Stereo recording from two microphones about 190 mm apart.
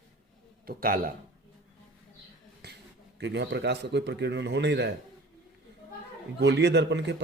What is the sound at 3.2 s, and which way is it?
Speech, 65° right (ahead or behind).